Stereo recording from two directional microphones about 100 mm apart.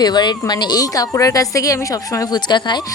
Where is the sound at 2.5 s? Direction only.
50° left (ahead or behind).